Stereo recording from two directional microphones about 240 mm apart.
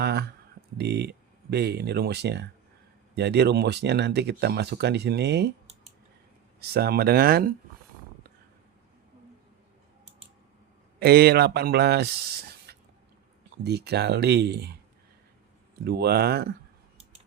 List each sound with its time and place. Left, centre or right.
0.0 s speech: right
6.7 s speech: right
11.0 s speech: right
15.8 s speech: right